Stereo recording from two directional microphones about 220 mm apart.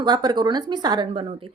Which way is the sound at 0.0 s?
20° right (ahead or behind).